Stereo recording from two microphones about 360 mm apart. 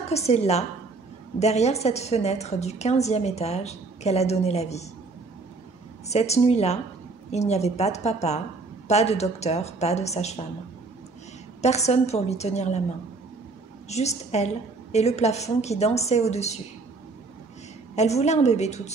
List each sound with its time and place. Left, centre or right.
0.1 s a woman's voice: centre
6.0 s a woman's voice: centre
11.6 s a woman's voice: centre
13.8 s a woman's voice: centre
17.9 s a woman's voice: centre